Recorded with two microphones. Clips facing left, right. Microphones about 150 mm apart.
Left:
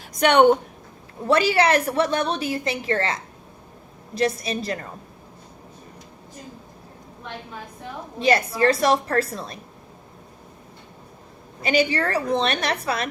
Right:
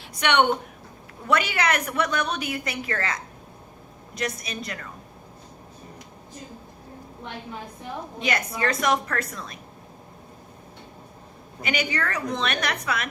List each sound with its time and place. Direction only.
0.1 s a woman's voice: 40° left (ahead or behind)
8.2 s a woman's voice: 30° left (ahead or behind)
11.6 s a woman's voice: 30° left (ahead or behind)